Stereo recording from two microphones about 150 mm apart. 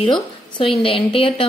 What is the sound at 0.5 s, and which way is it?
Speech, 35° left (ahead or behind).